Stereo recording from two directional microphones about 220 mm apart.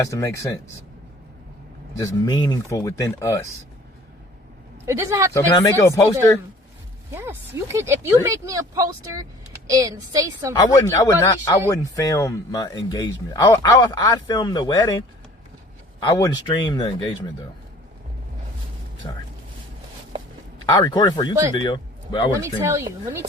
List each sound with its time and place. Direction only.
0.0 s speech: 15° left (ahead or behind)
2.0 s speech: 15° left (ahead or behind)
4.9 s speech: 15° right (ahead or behind)
5.3 s speech: 15° left (ahead or behind)
7.1 s speech: 10° right (ahead or behind)
10.5 s speech: 20° left (ahead or behind)
16.0 s speech: 15° left (ahead or behind)
19.0 s speech: 20° left (ahead or behind)
20.7 s a man's voice: 20° left (ahead or behind)
22.4 s speech: 10° right (ahead or behind)